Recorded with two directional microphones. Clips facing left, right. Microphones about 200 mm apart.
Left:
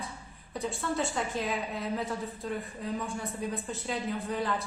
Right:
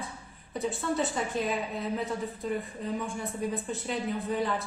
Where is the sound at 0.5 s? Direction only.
Centre (ahead or behind).